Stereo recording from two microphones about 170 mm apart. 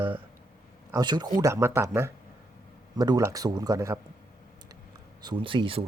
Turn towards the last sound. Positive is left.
turn(degrees=-30)  # may be behind; listen again after turning